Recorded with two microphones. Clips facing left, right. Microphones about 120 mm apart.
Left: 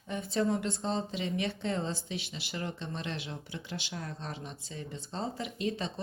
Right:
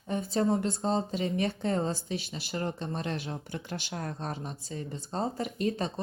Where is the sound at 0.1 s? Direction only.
35° right (ahead or behind).